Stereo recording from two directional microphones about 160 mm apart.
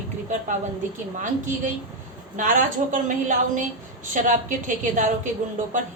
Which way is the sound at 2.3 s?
55° right (ahead or behind).